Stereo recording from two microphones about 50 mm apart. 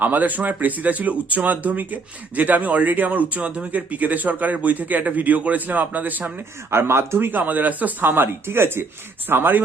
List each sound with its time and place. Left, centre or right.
0.0 s speech: right
6.7 s speech: right
7.3 s speech: right